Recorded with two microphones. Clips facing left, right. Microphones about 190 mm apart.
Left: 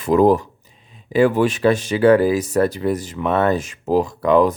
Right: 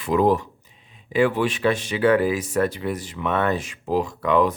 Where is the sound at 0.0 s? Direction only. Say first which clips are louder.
Left 5 dB; 45° left (ahead or behind).